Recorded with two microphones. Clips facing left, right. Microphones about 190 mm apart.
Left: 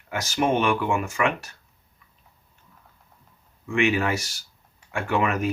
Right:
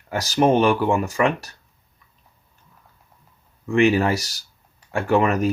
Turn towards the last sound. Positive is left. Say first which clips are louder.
# right 5 dB
turn(degrees=-40)  # may be behind; listen again after turning